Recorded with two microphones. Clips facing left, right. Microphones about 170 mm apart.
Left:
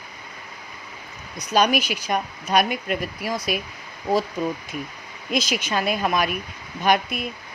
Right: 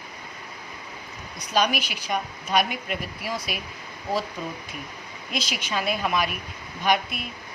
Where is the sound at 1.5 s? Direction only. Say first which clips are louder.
Left 4 dB; 45° left (ahead or behind).